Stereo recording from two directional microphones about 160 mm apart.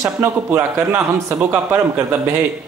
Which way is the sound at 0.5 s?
15° right (ahead or behind).